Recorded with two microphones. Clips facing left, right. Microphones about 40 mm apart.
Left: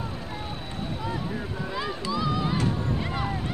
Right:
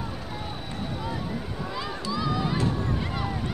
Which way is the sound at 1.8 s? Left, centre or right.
Centre.